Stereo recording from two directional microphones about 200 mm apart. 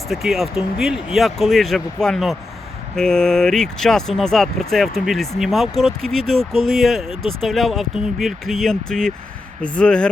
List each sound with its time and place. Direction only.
0.1 s speech: centre (ahead or behind)